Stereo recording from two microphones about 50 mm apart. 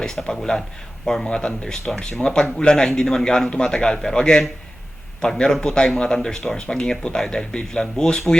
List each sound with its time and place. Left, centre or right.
0.0 s speech: centre